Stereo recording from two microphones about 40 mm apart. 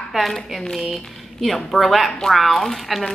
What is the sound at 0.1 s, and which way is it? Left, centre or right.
A woman's voice, centre.